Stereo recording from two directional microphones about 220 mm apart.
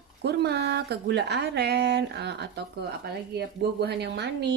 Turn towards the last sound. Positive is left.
turn(degrees=-50)  # may be behind; listen again after turning